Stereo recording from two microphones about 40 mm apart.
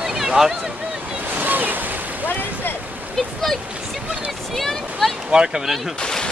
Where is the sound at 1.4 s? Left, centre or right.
Right.